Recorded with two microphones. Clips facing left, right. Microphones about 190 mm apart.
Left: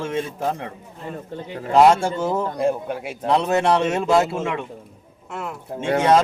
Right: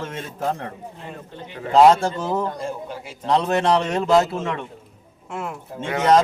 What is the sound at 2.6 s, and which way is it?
Speech, 60° left (ahead or behind).